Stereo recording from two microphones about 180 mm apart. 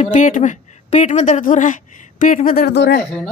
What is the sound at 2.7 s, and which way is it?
Speech, 70° left (ahead or behind).